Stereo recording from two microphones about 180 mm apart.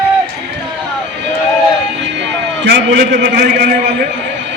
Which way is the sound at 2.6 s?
70° right (ahead or behind).